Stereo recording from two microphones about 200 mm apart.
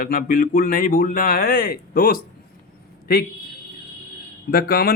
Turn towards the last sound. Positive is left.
turn(degrees=50)  # may be behind; listen again after turning